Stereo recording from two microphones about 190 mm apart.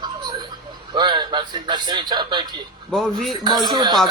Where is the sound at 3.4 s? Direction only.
20° right (ahead or behind).